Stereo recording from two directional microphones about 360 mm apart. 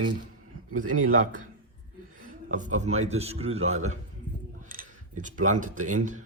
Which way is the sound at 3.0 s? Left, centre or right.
Centre.